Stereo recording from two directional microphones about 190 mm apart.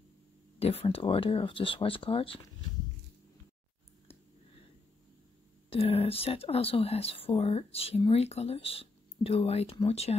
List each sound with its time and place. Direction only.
0.6 s speech: 30° left (ahead or behind)
5.7 s speech: 30° left (ahead or behind)